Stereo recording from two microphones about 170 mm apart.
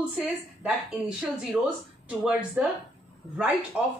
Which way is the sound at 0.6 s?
5° right (ahead or behind).